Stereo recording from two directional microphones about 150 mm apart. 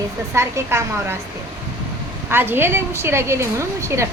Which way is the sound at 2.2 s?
15° right (ahead or behind).